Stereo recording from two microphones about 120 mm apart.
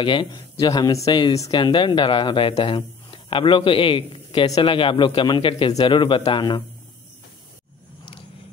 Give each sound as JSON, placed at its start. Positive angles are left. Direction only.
{"t": 0.0, "sound": "speech", "side_deg": 45}
{"t": 0.6, "sound": "a man's voice", "side_deg": 30}
{"t": 1.6, "sound": "speech", "side_deg": 45}